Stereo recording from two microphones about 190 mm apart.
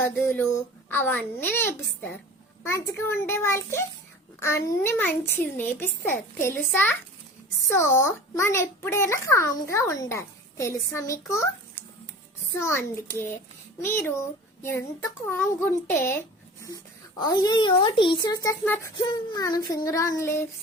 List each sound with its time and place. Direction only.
0.2 s a child's voice: 10° left (ahead or behind)
12.5 s a child's voice: 15° left (ahead or behind)
13.7 s child singing: 10° left (ahead or behind)
15.3 s a child's voice: 10° left (ahead or behind)